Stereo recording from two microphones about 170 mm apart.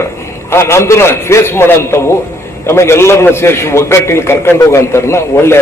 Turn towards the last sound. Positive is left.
turn(degrees=15)  # may be behind; listen again after turning